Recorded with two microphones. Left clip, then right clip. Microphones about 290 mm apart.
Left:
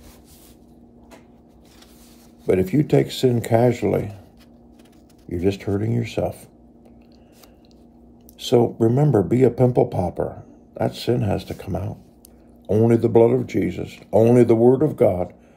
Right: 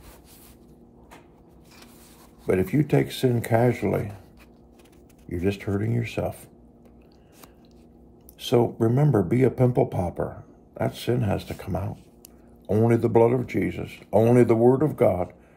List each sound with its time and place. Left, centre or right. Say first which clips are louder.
2.4 s speech: left 4 dB; centre
5.3 s speech: left 5 dB; centre
8.4 s speech: left 4 dB; centre